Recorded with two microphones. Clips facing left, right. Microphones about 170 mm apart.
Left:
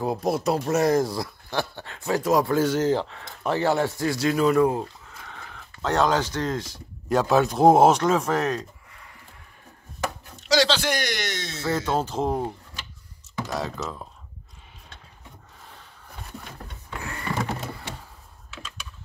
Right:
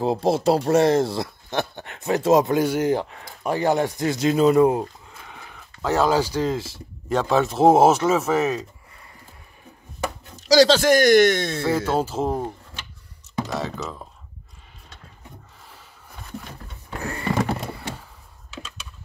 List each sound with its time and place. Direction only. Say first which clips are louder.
0.0 s speech: right 4 dB; 25° right (ahead or behind)
5.3 s speech: even; 10° right (ahead or behind)
10.5 s speech: right 7 dB; 40° right (ahead or behind)
11.6 s speech: right 1 dB; 10° right (ahead or behind)